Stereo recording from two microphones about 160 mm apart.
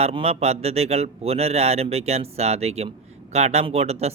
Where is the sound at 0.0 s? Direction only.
40° right (ahead or behind).